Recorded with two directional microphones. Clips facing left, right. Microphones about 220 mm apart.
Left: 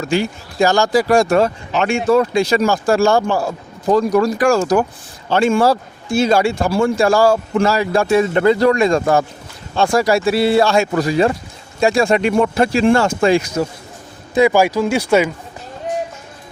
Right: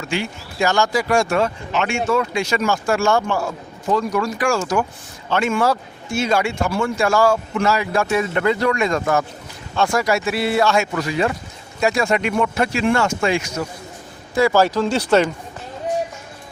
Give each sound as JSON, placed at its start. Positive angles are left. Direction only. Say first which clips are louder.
{"t": 0.0, "sound": "speech", "louder": "left 6 dB", "side_deg": 40}
{"t": 14.3, "sound": "speech", "louder": "left 3 dB", "side_deg": 15}